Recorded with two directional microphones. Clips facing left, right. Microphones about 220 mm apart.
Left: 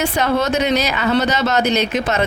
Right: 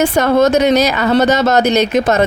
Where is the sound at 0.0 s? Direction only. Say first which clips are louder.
Right 7 dB; 45° right (ahead or behind).